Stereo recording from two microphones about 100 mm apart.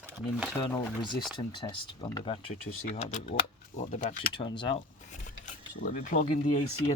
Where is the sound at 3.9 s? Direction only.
55° left (ahead or behind).